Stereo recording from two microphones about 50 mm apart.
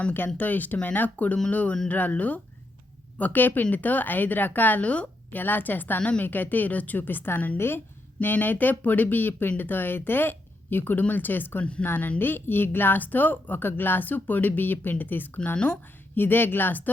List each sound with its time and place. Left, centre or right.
0.3 s speech: left
11.6 s speech: left
11.9 s speech: left